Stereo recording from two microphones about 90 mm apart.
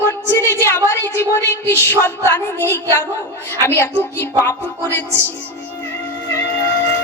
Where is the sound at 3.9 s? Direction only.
25° left (ahead or behind).